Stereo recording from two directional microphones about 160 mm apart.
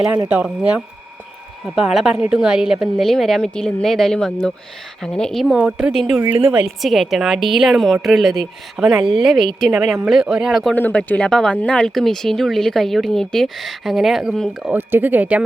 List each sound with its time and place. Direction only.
0.3 s speech: 10° right (ahead or behind)
10.8 s speech: 10° left (ahead or behind)
14.7 s speech: 15° right (ahead or behind)